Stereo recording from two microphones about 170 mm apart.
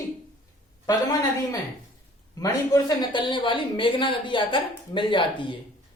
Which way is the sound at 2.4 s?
20° left (ahead or behind).